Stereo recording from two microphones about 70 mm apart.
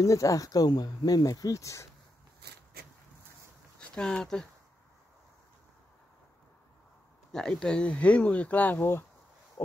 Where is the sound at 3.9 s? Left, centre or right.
Centre.